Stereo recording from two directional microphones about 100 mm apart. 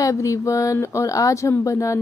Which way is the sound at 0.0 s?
35° left (ahead or behind).